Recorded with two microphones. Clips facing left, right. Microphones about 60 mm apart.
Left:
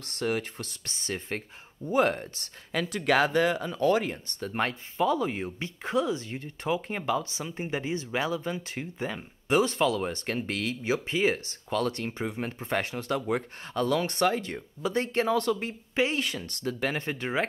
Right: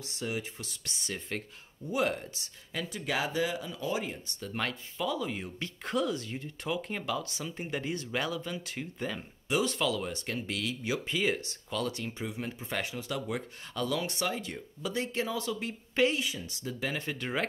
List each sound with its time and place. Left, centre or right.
0.0 s speech: left
0.8 s speech: left
2.7 s speech: left
4.5 s speech: left
5.8 s speech: centre
9.5 s speech: left
10.1 s speech: left
11.8 s speech: left
14.8 s speech: left
15.1 s speech: left
16.9 s speech: left
17.2 s speech: centre